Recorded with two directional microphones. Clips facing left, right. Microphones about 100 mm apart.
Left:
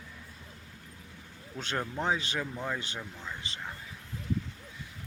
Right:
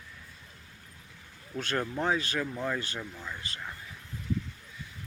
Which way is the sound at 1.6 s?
20° left (ahead or behind).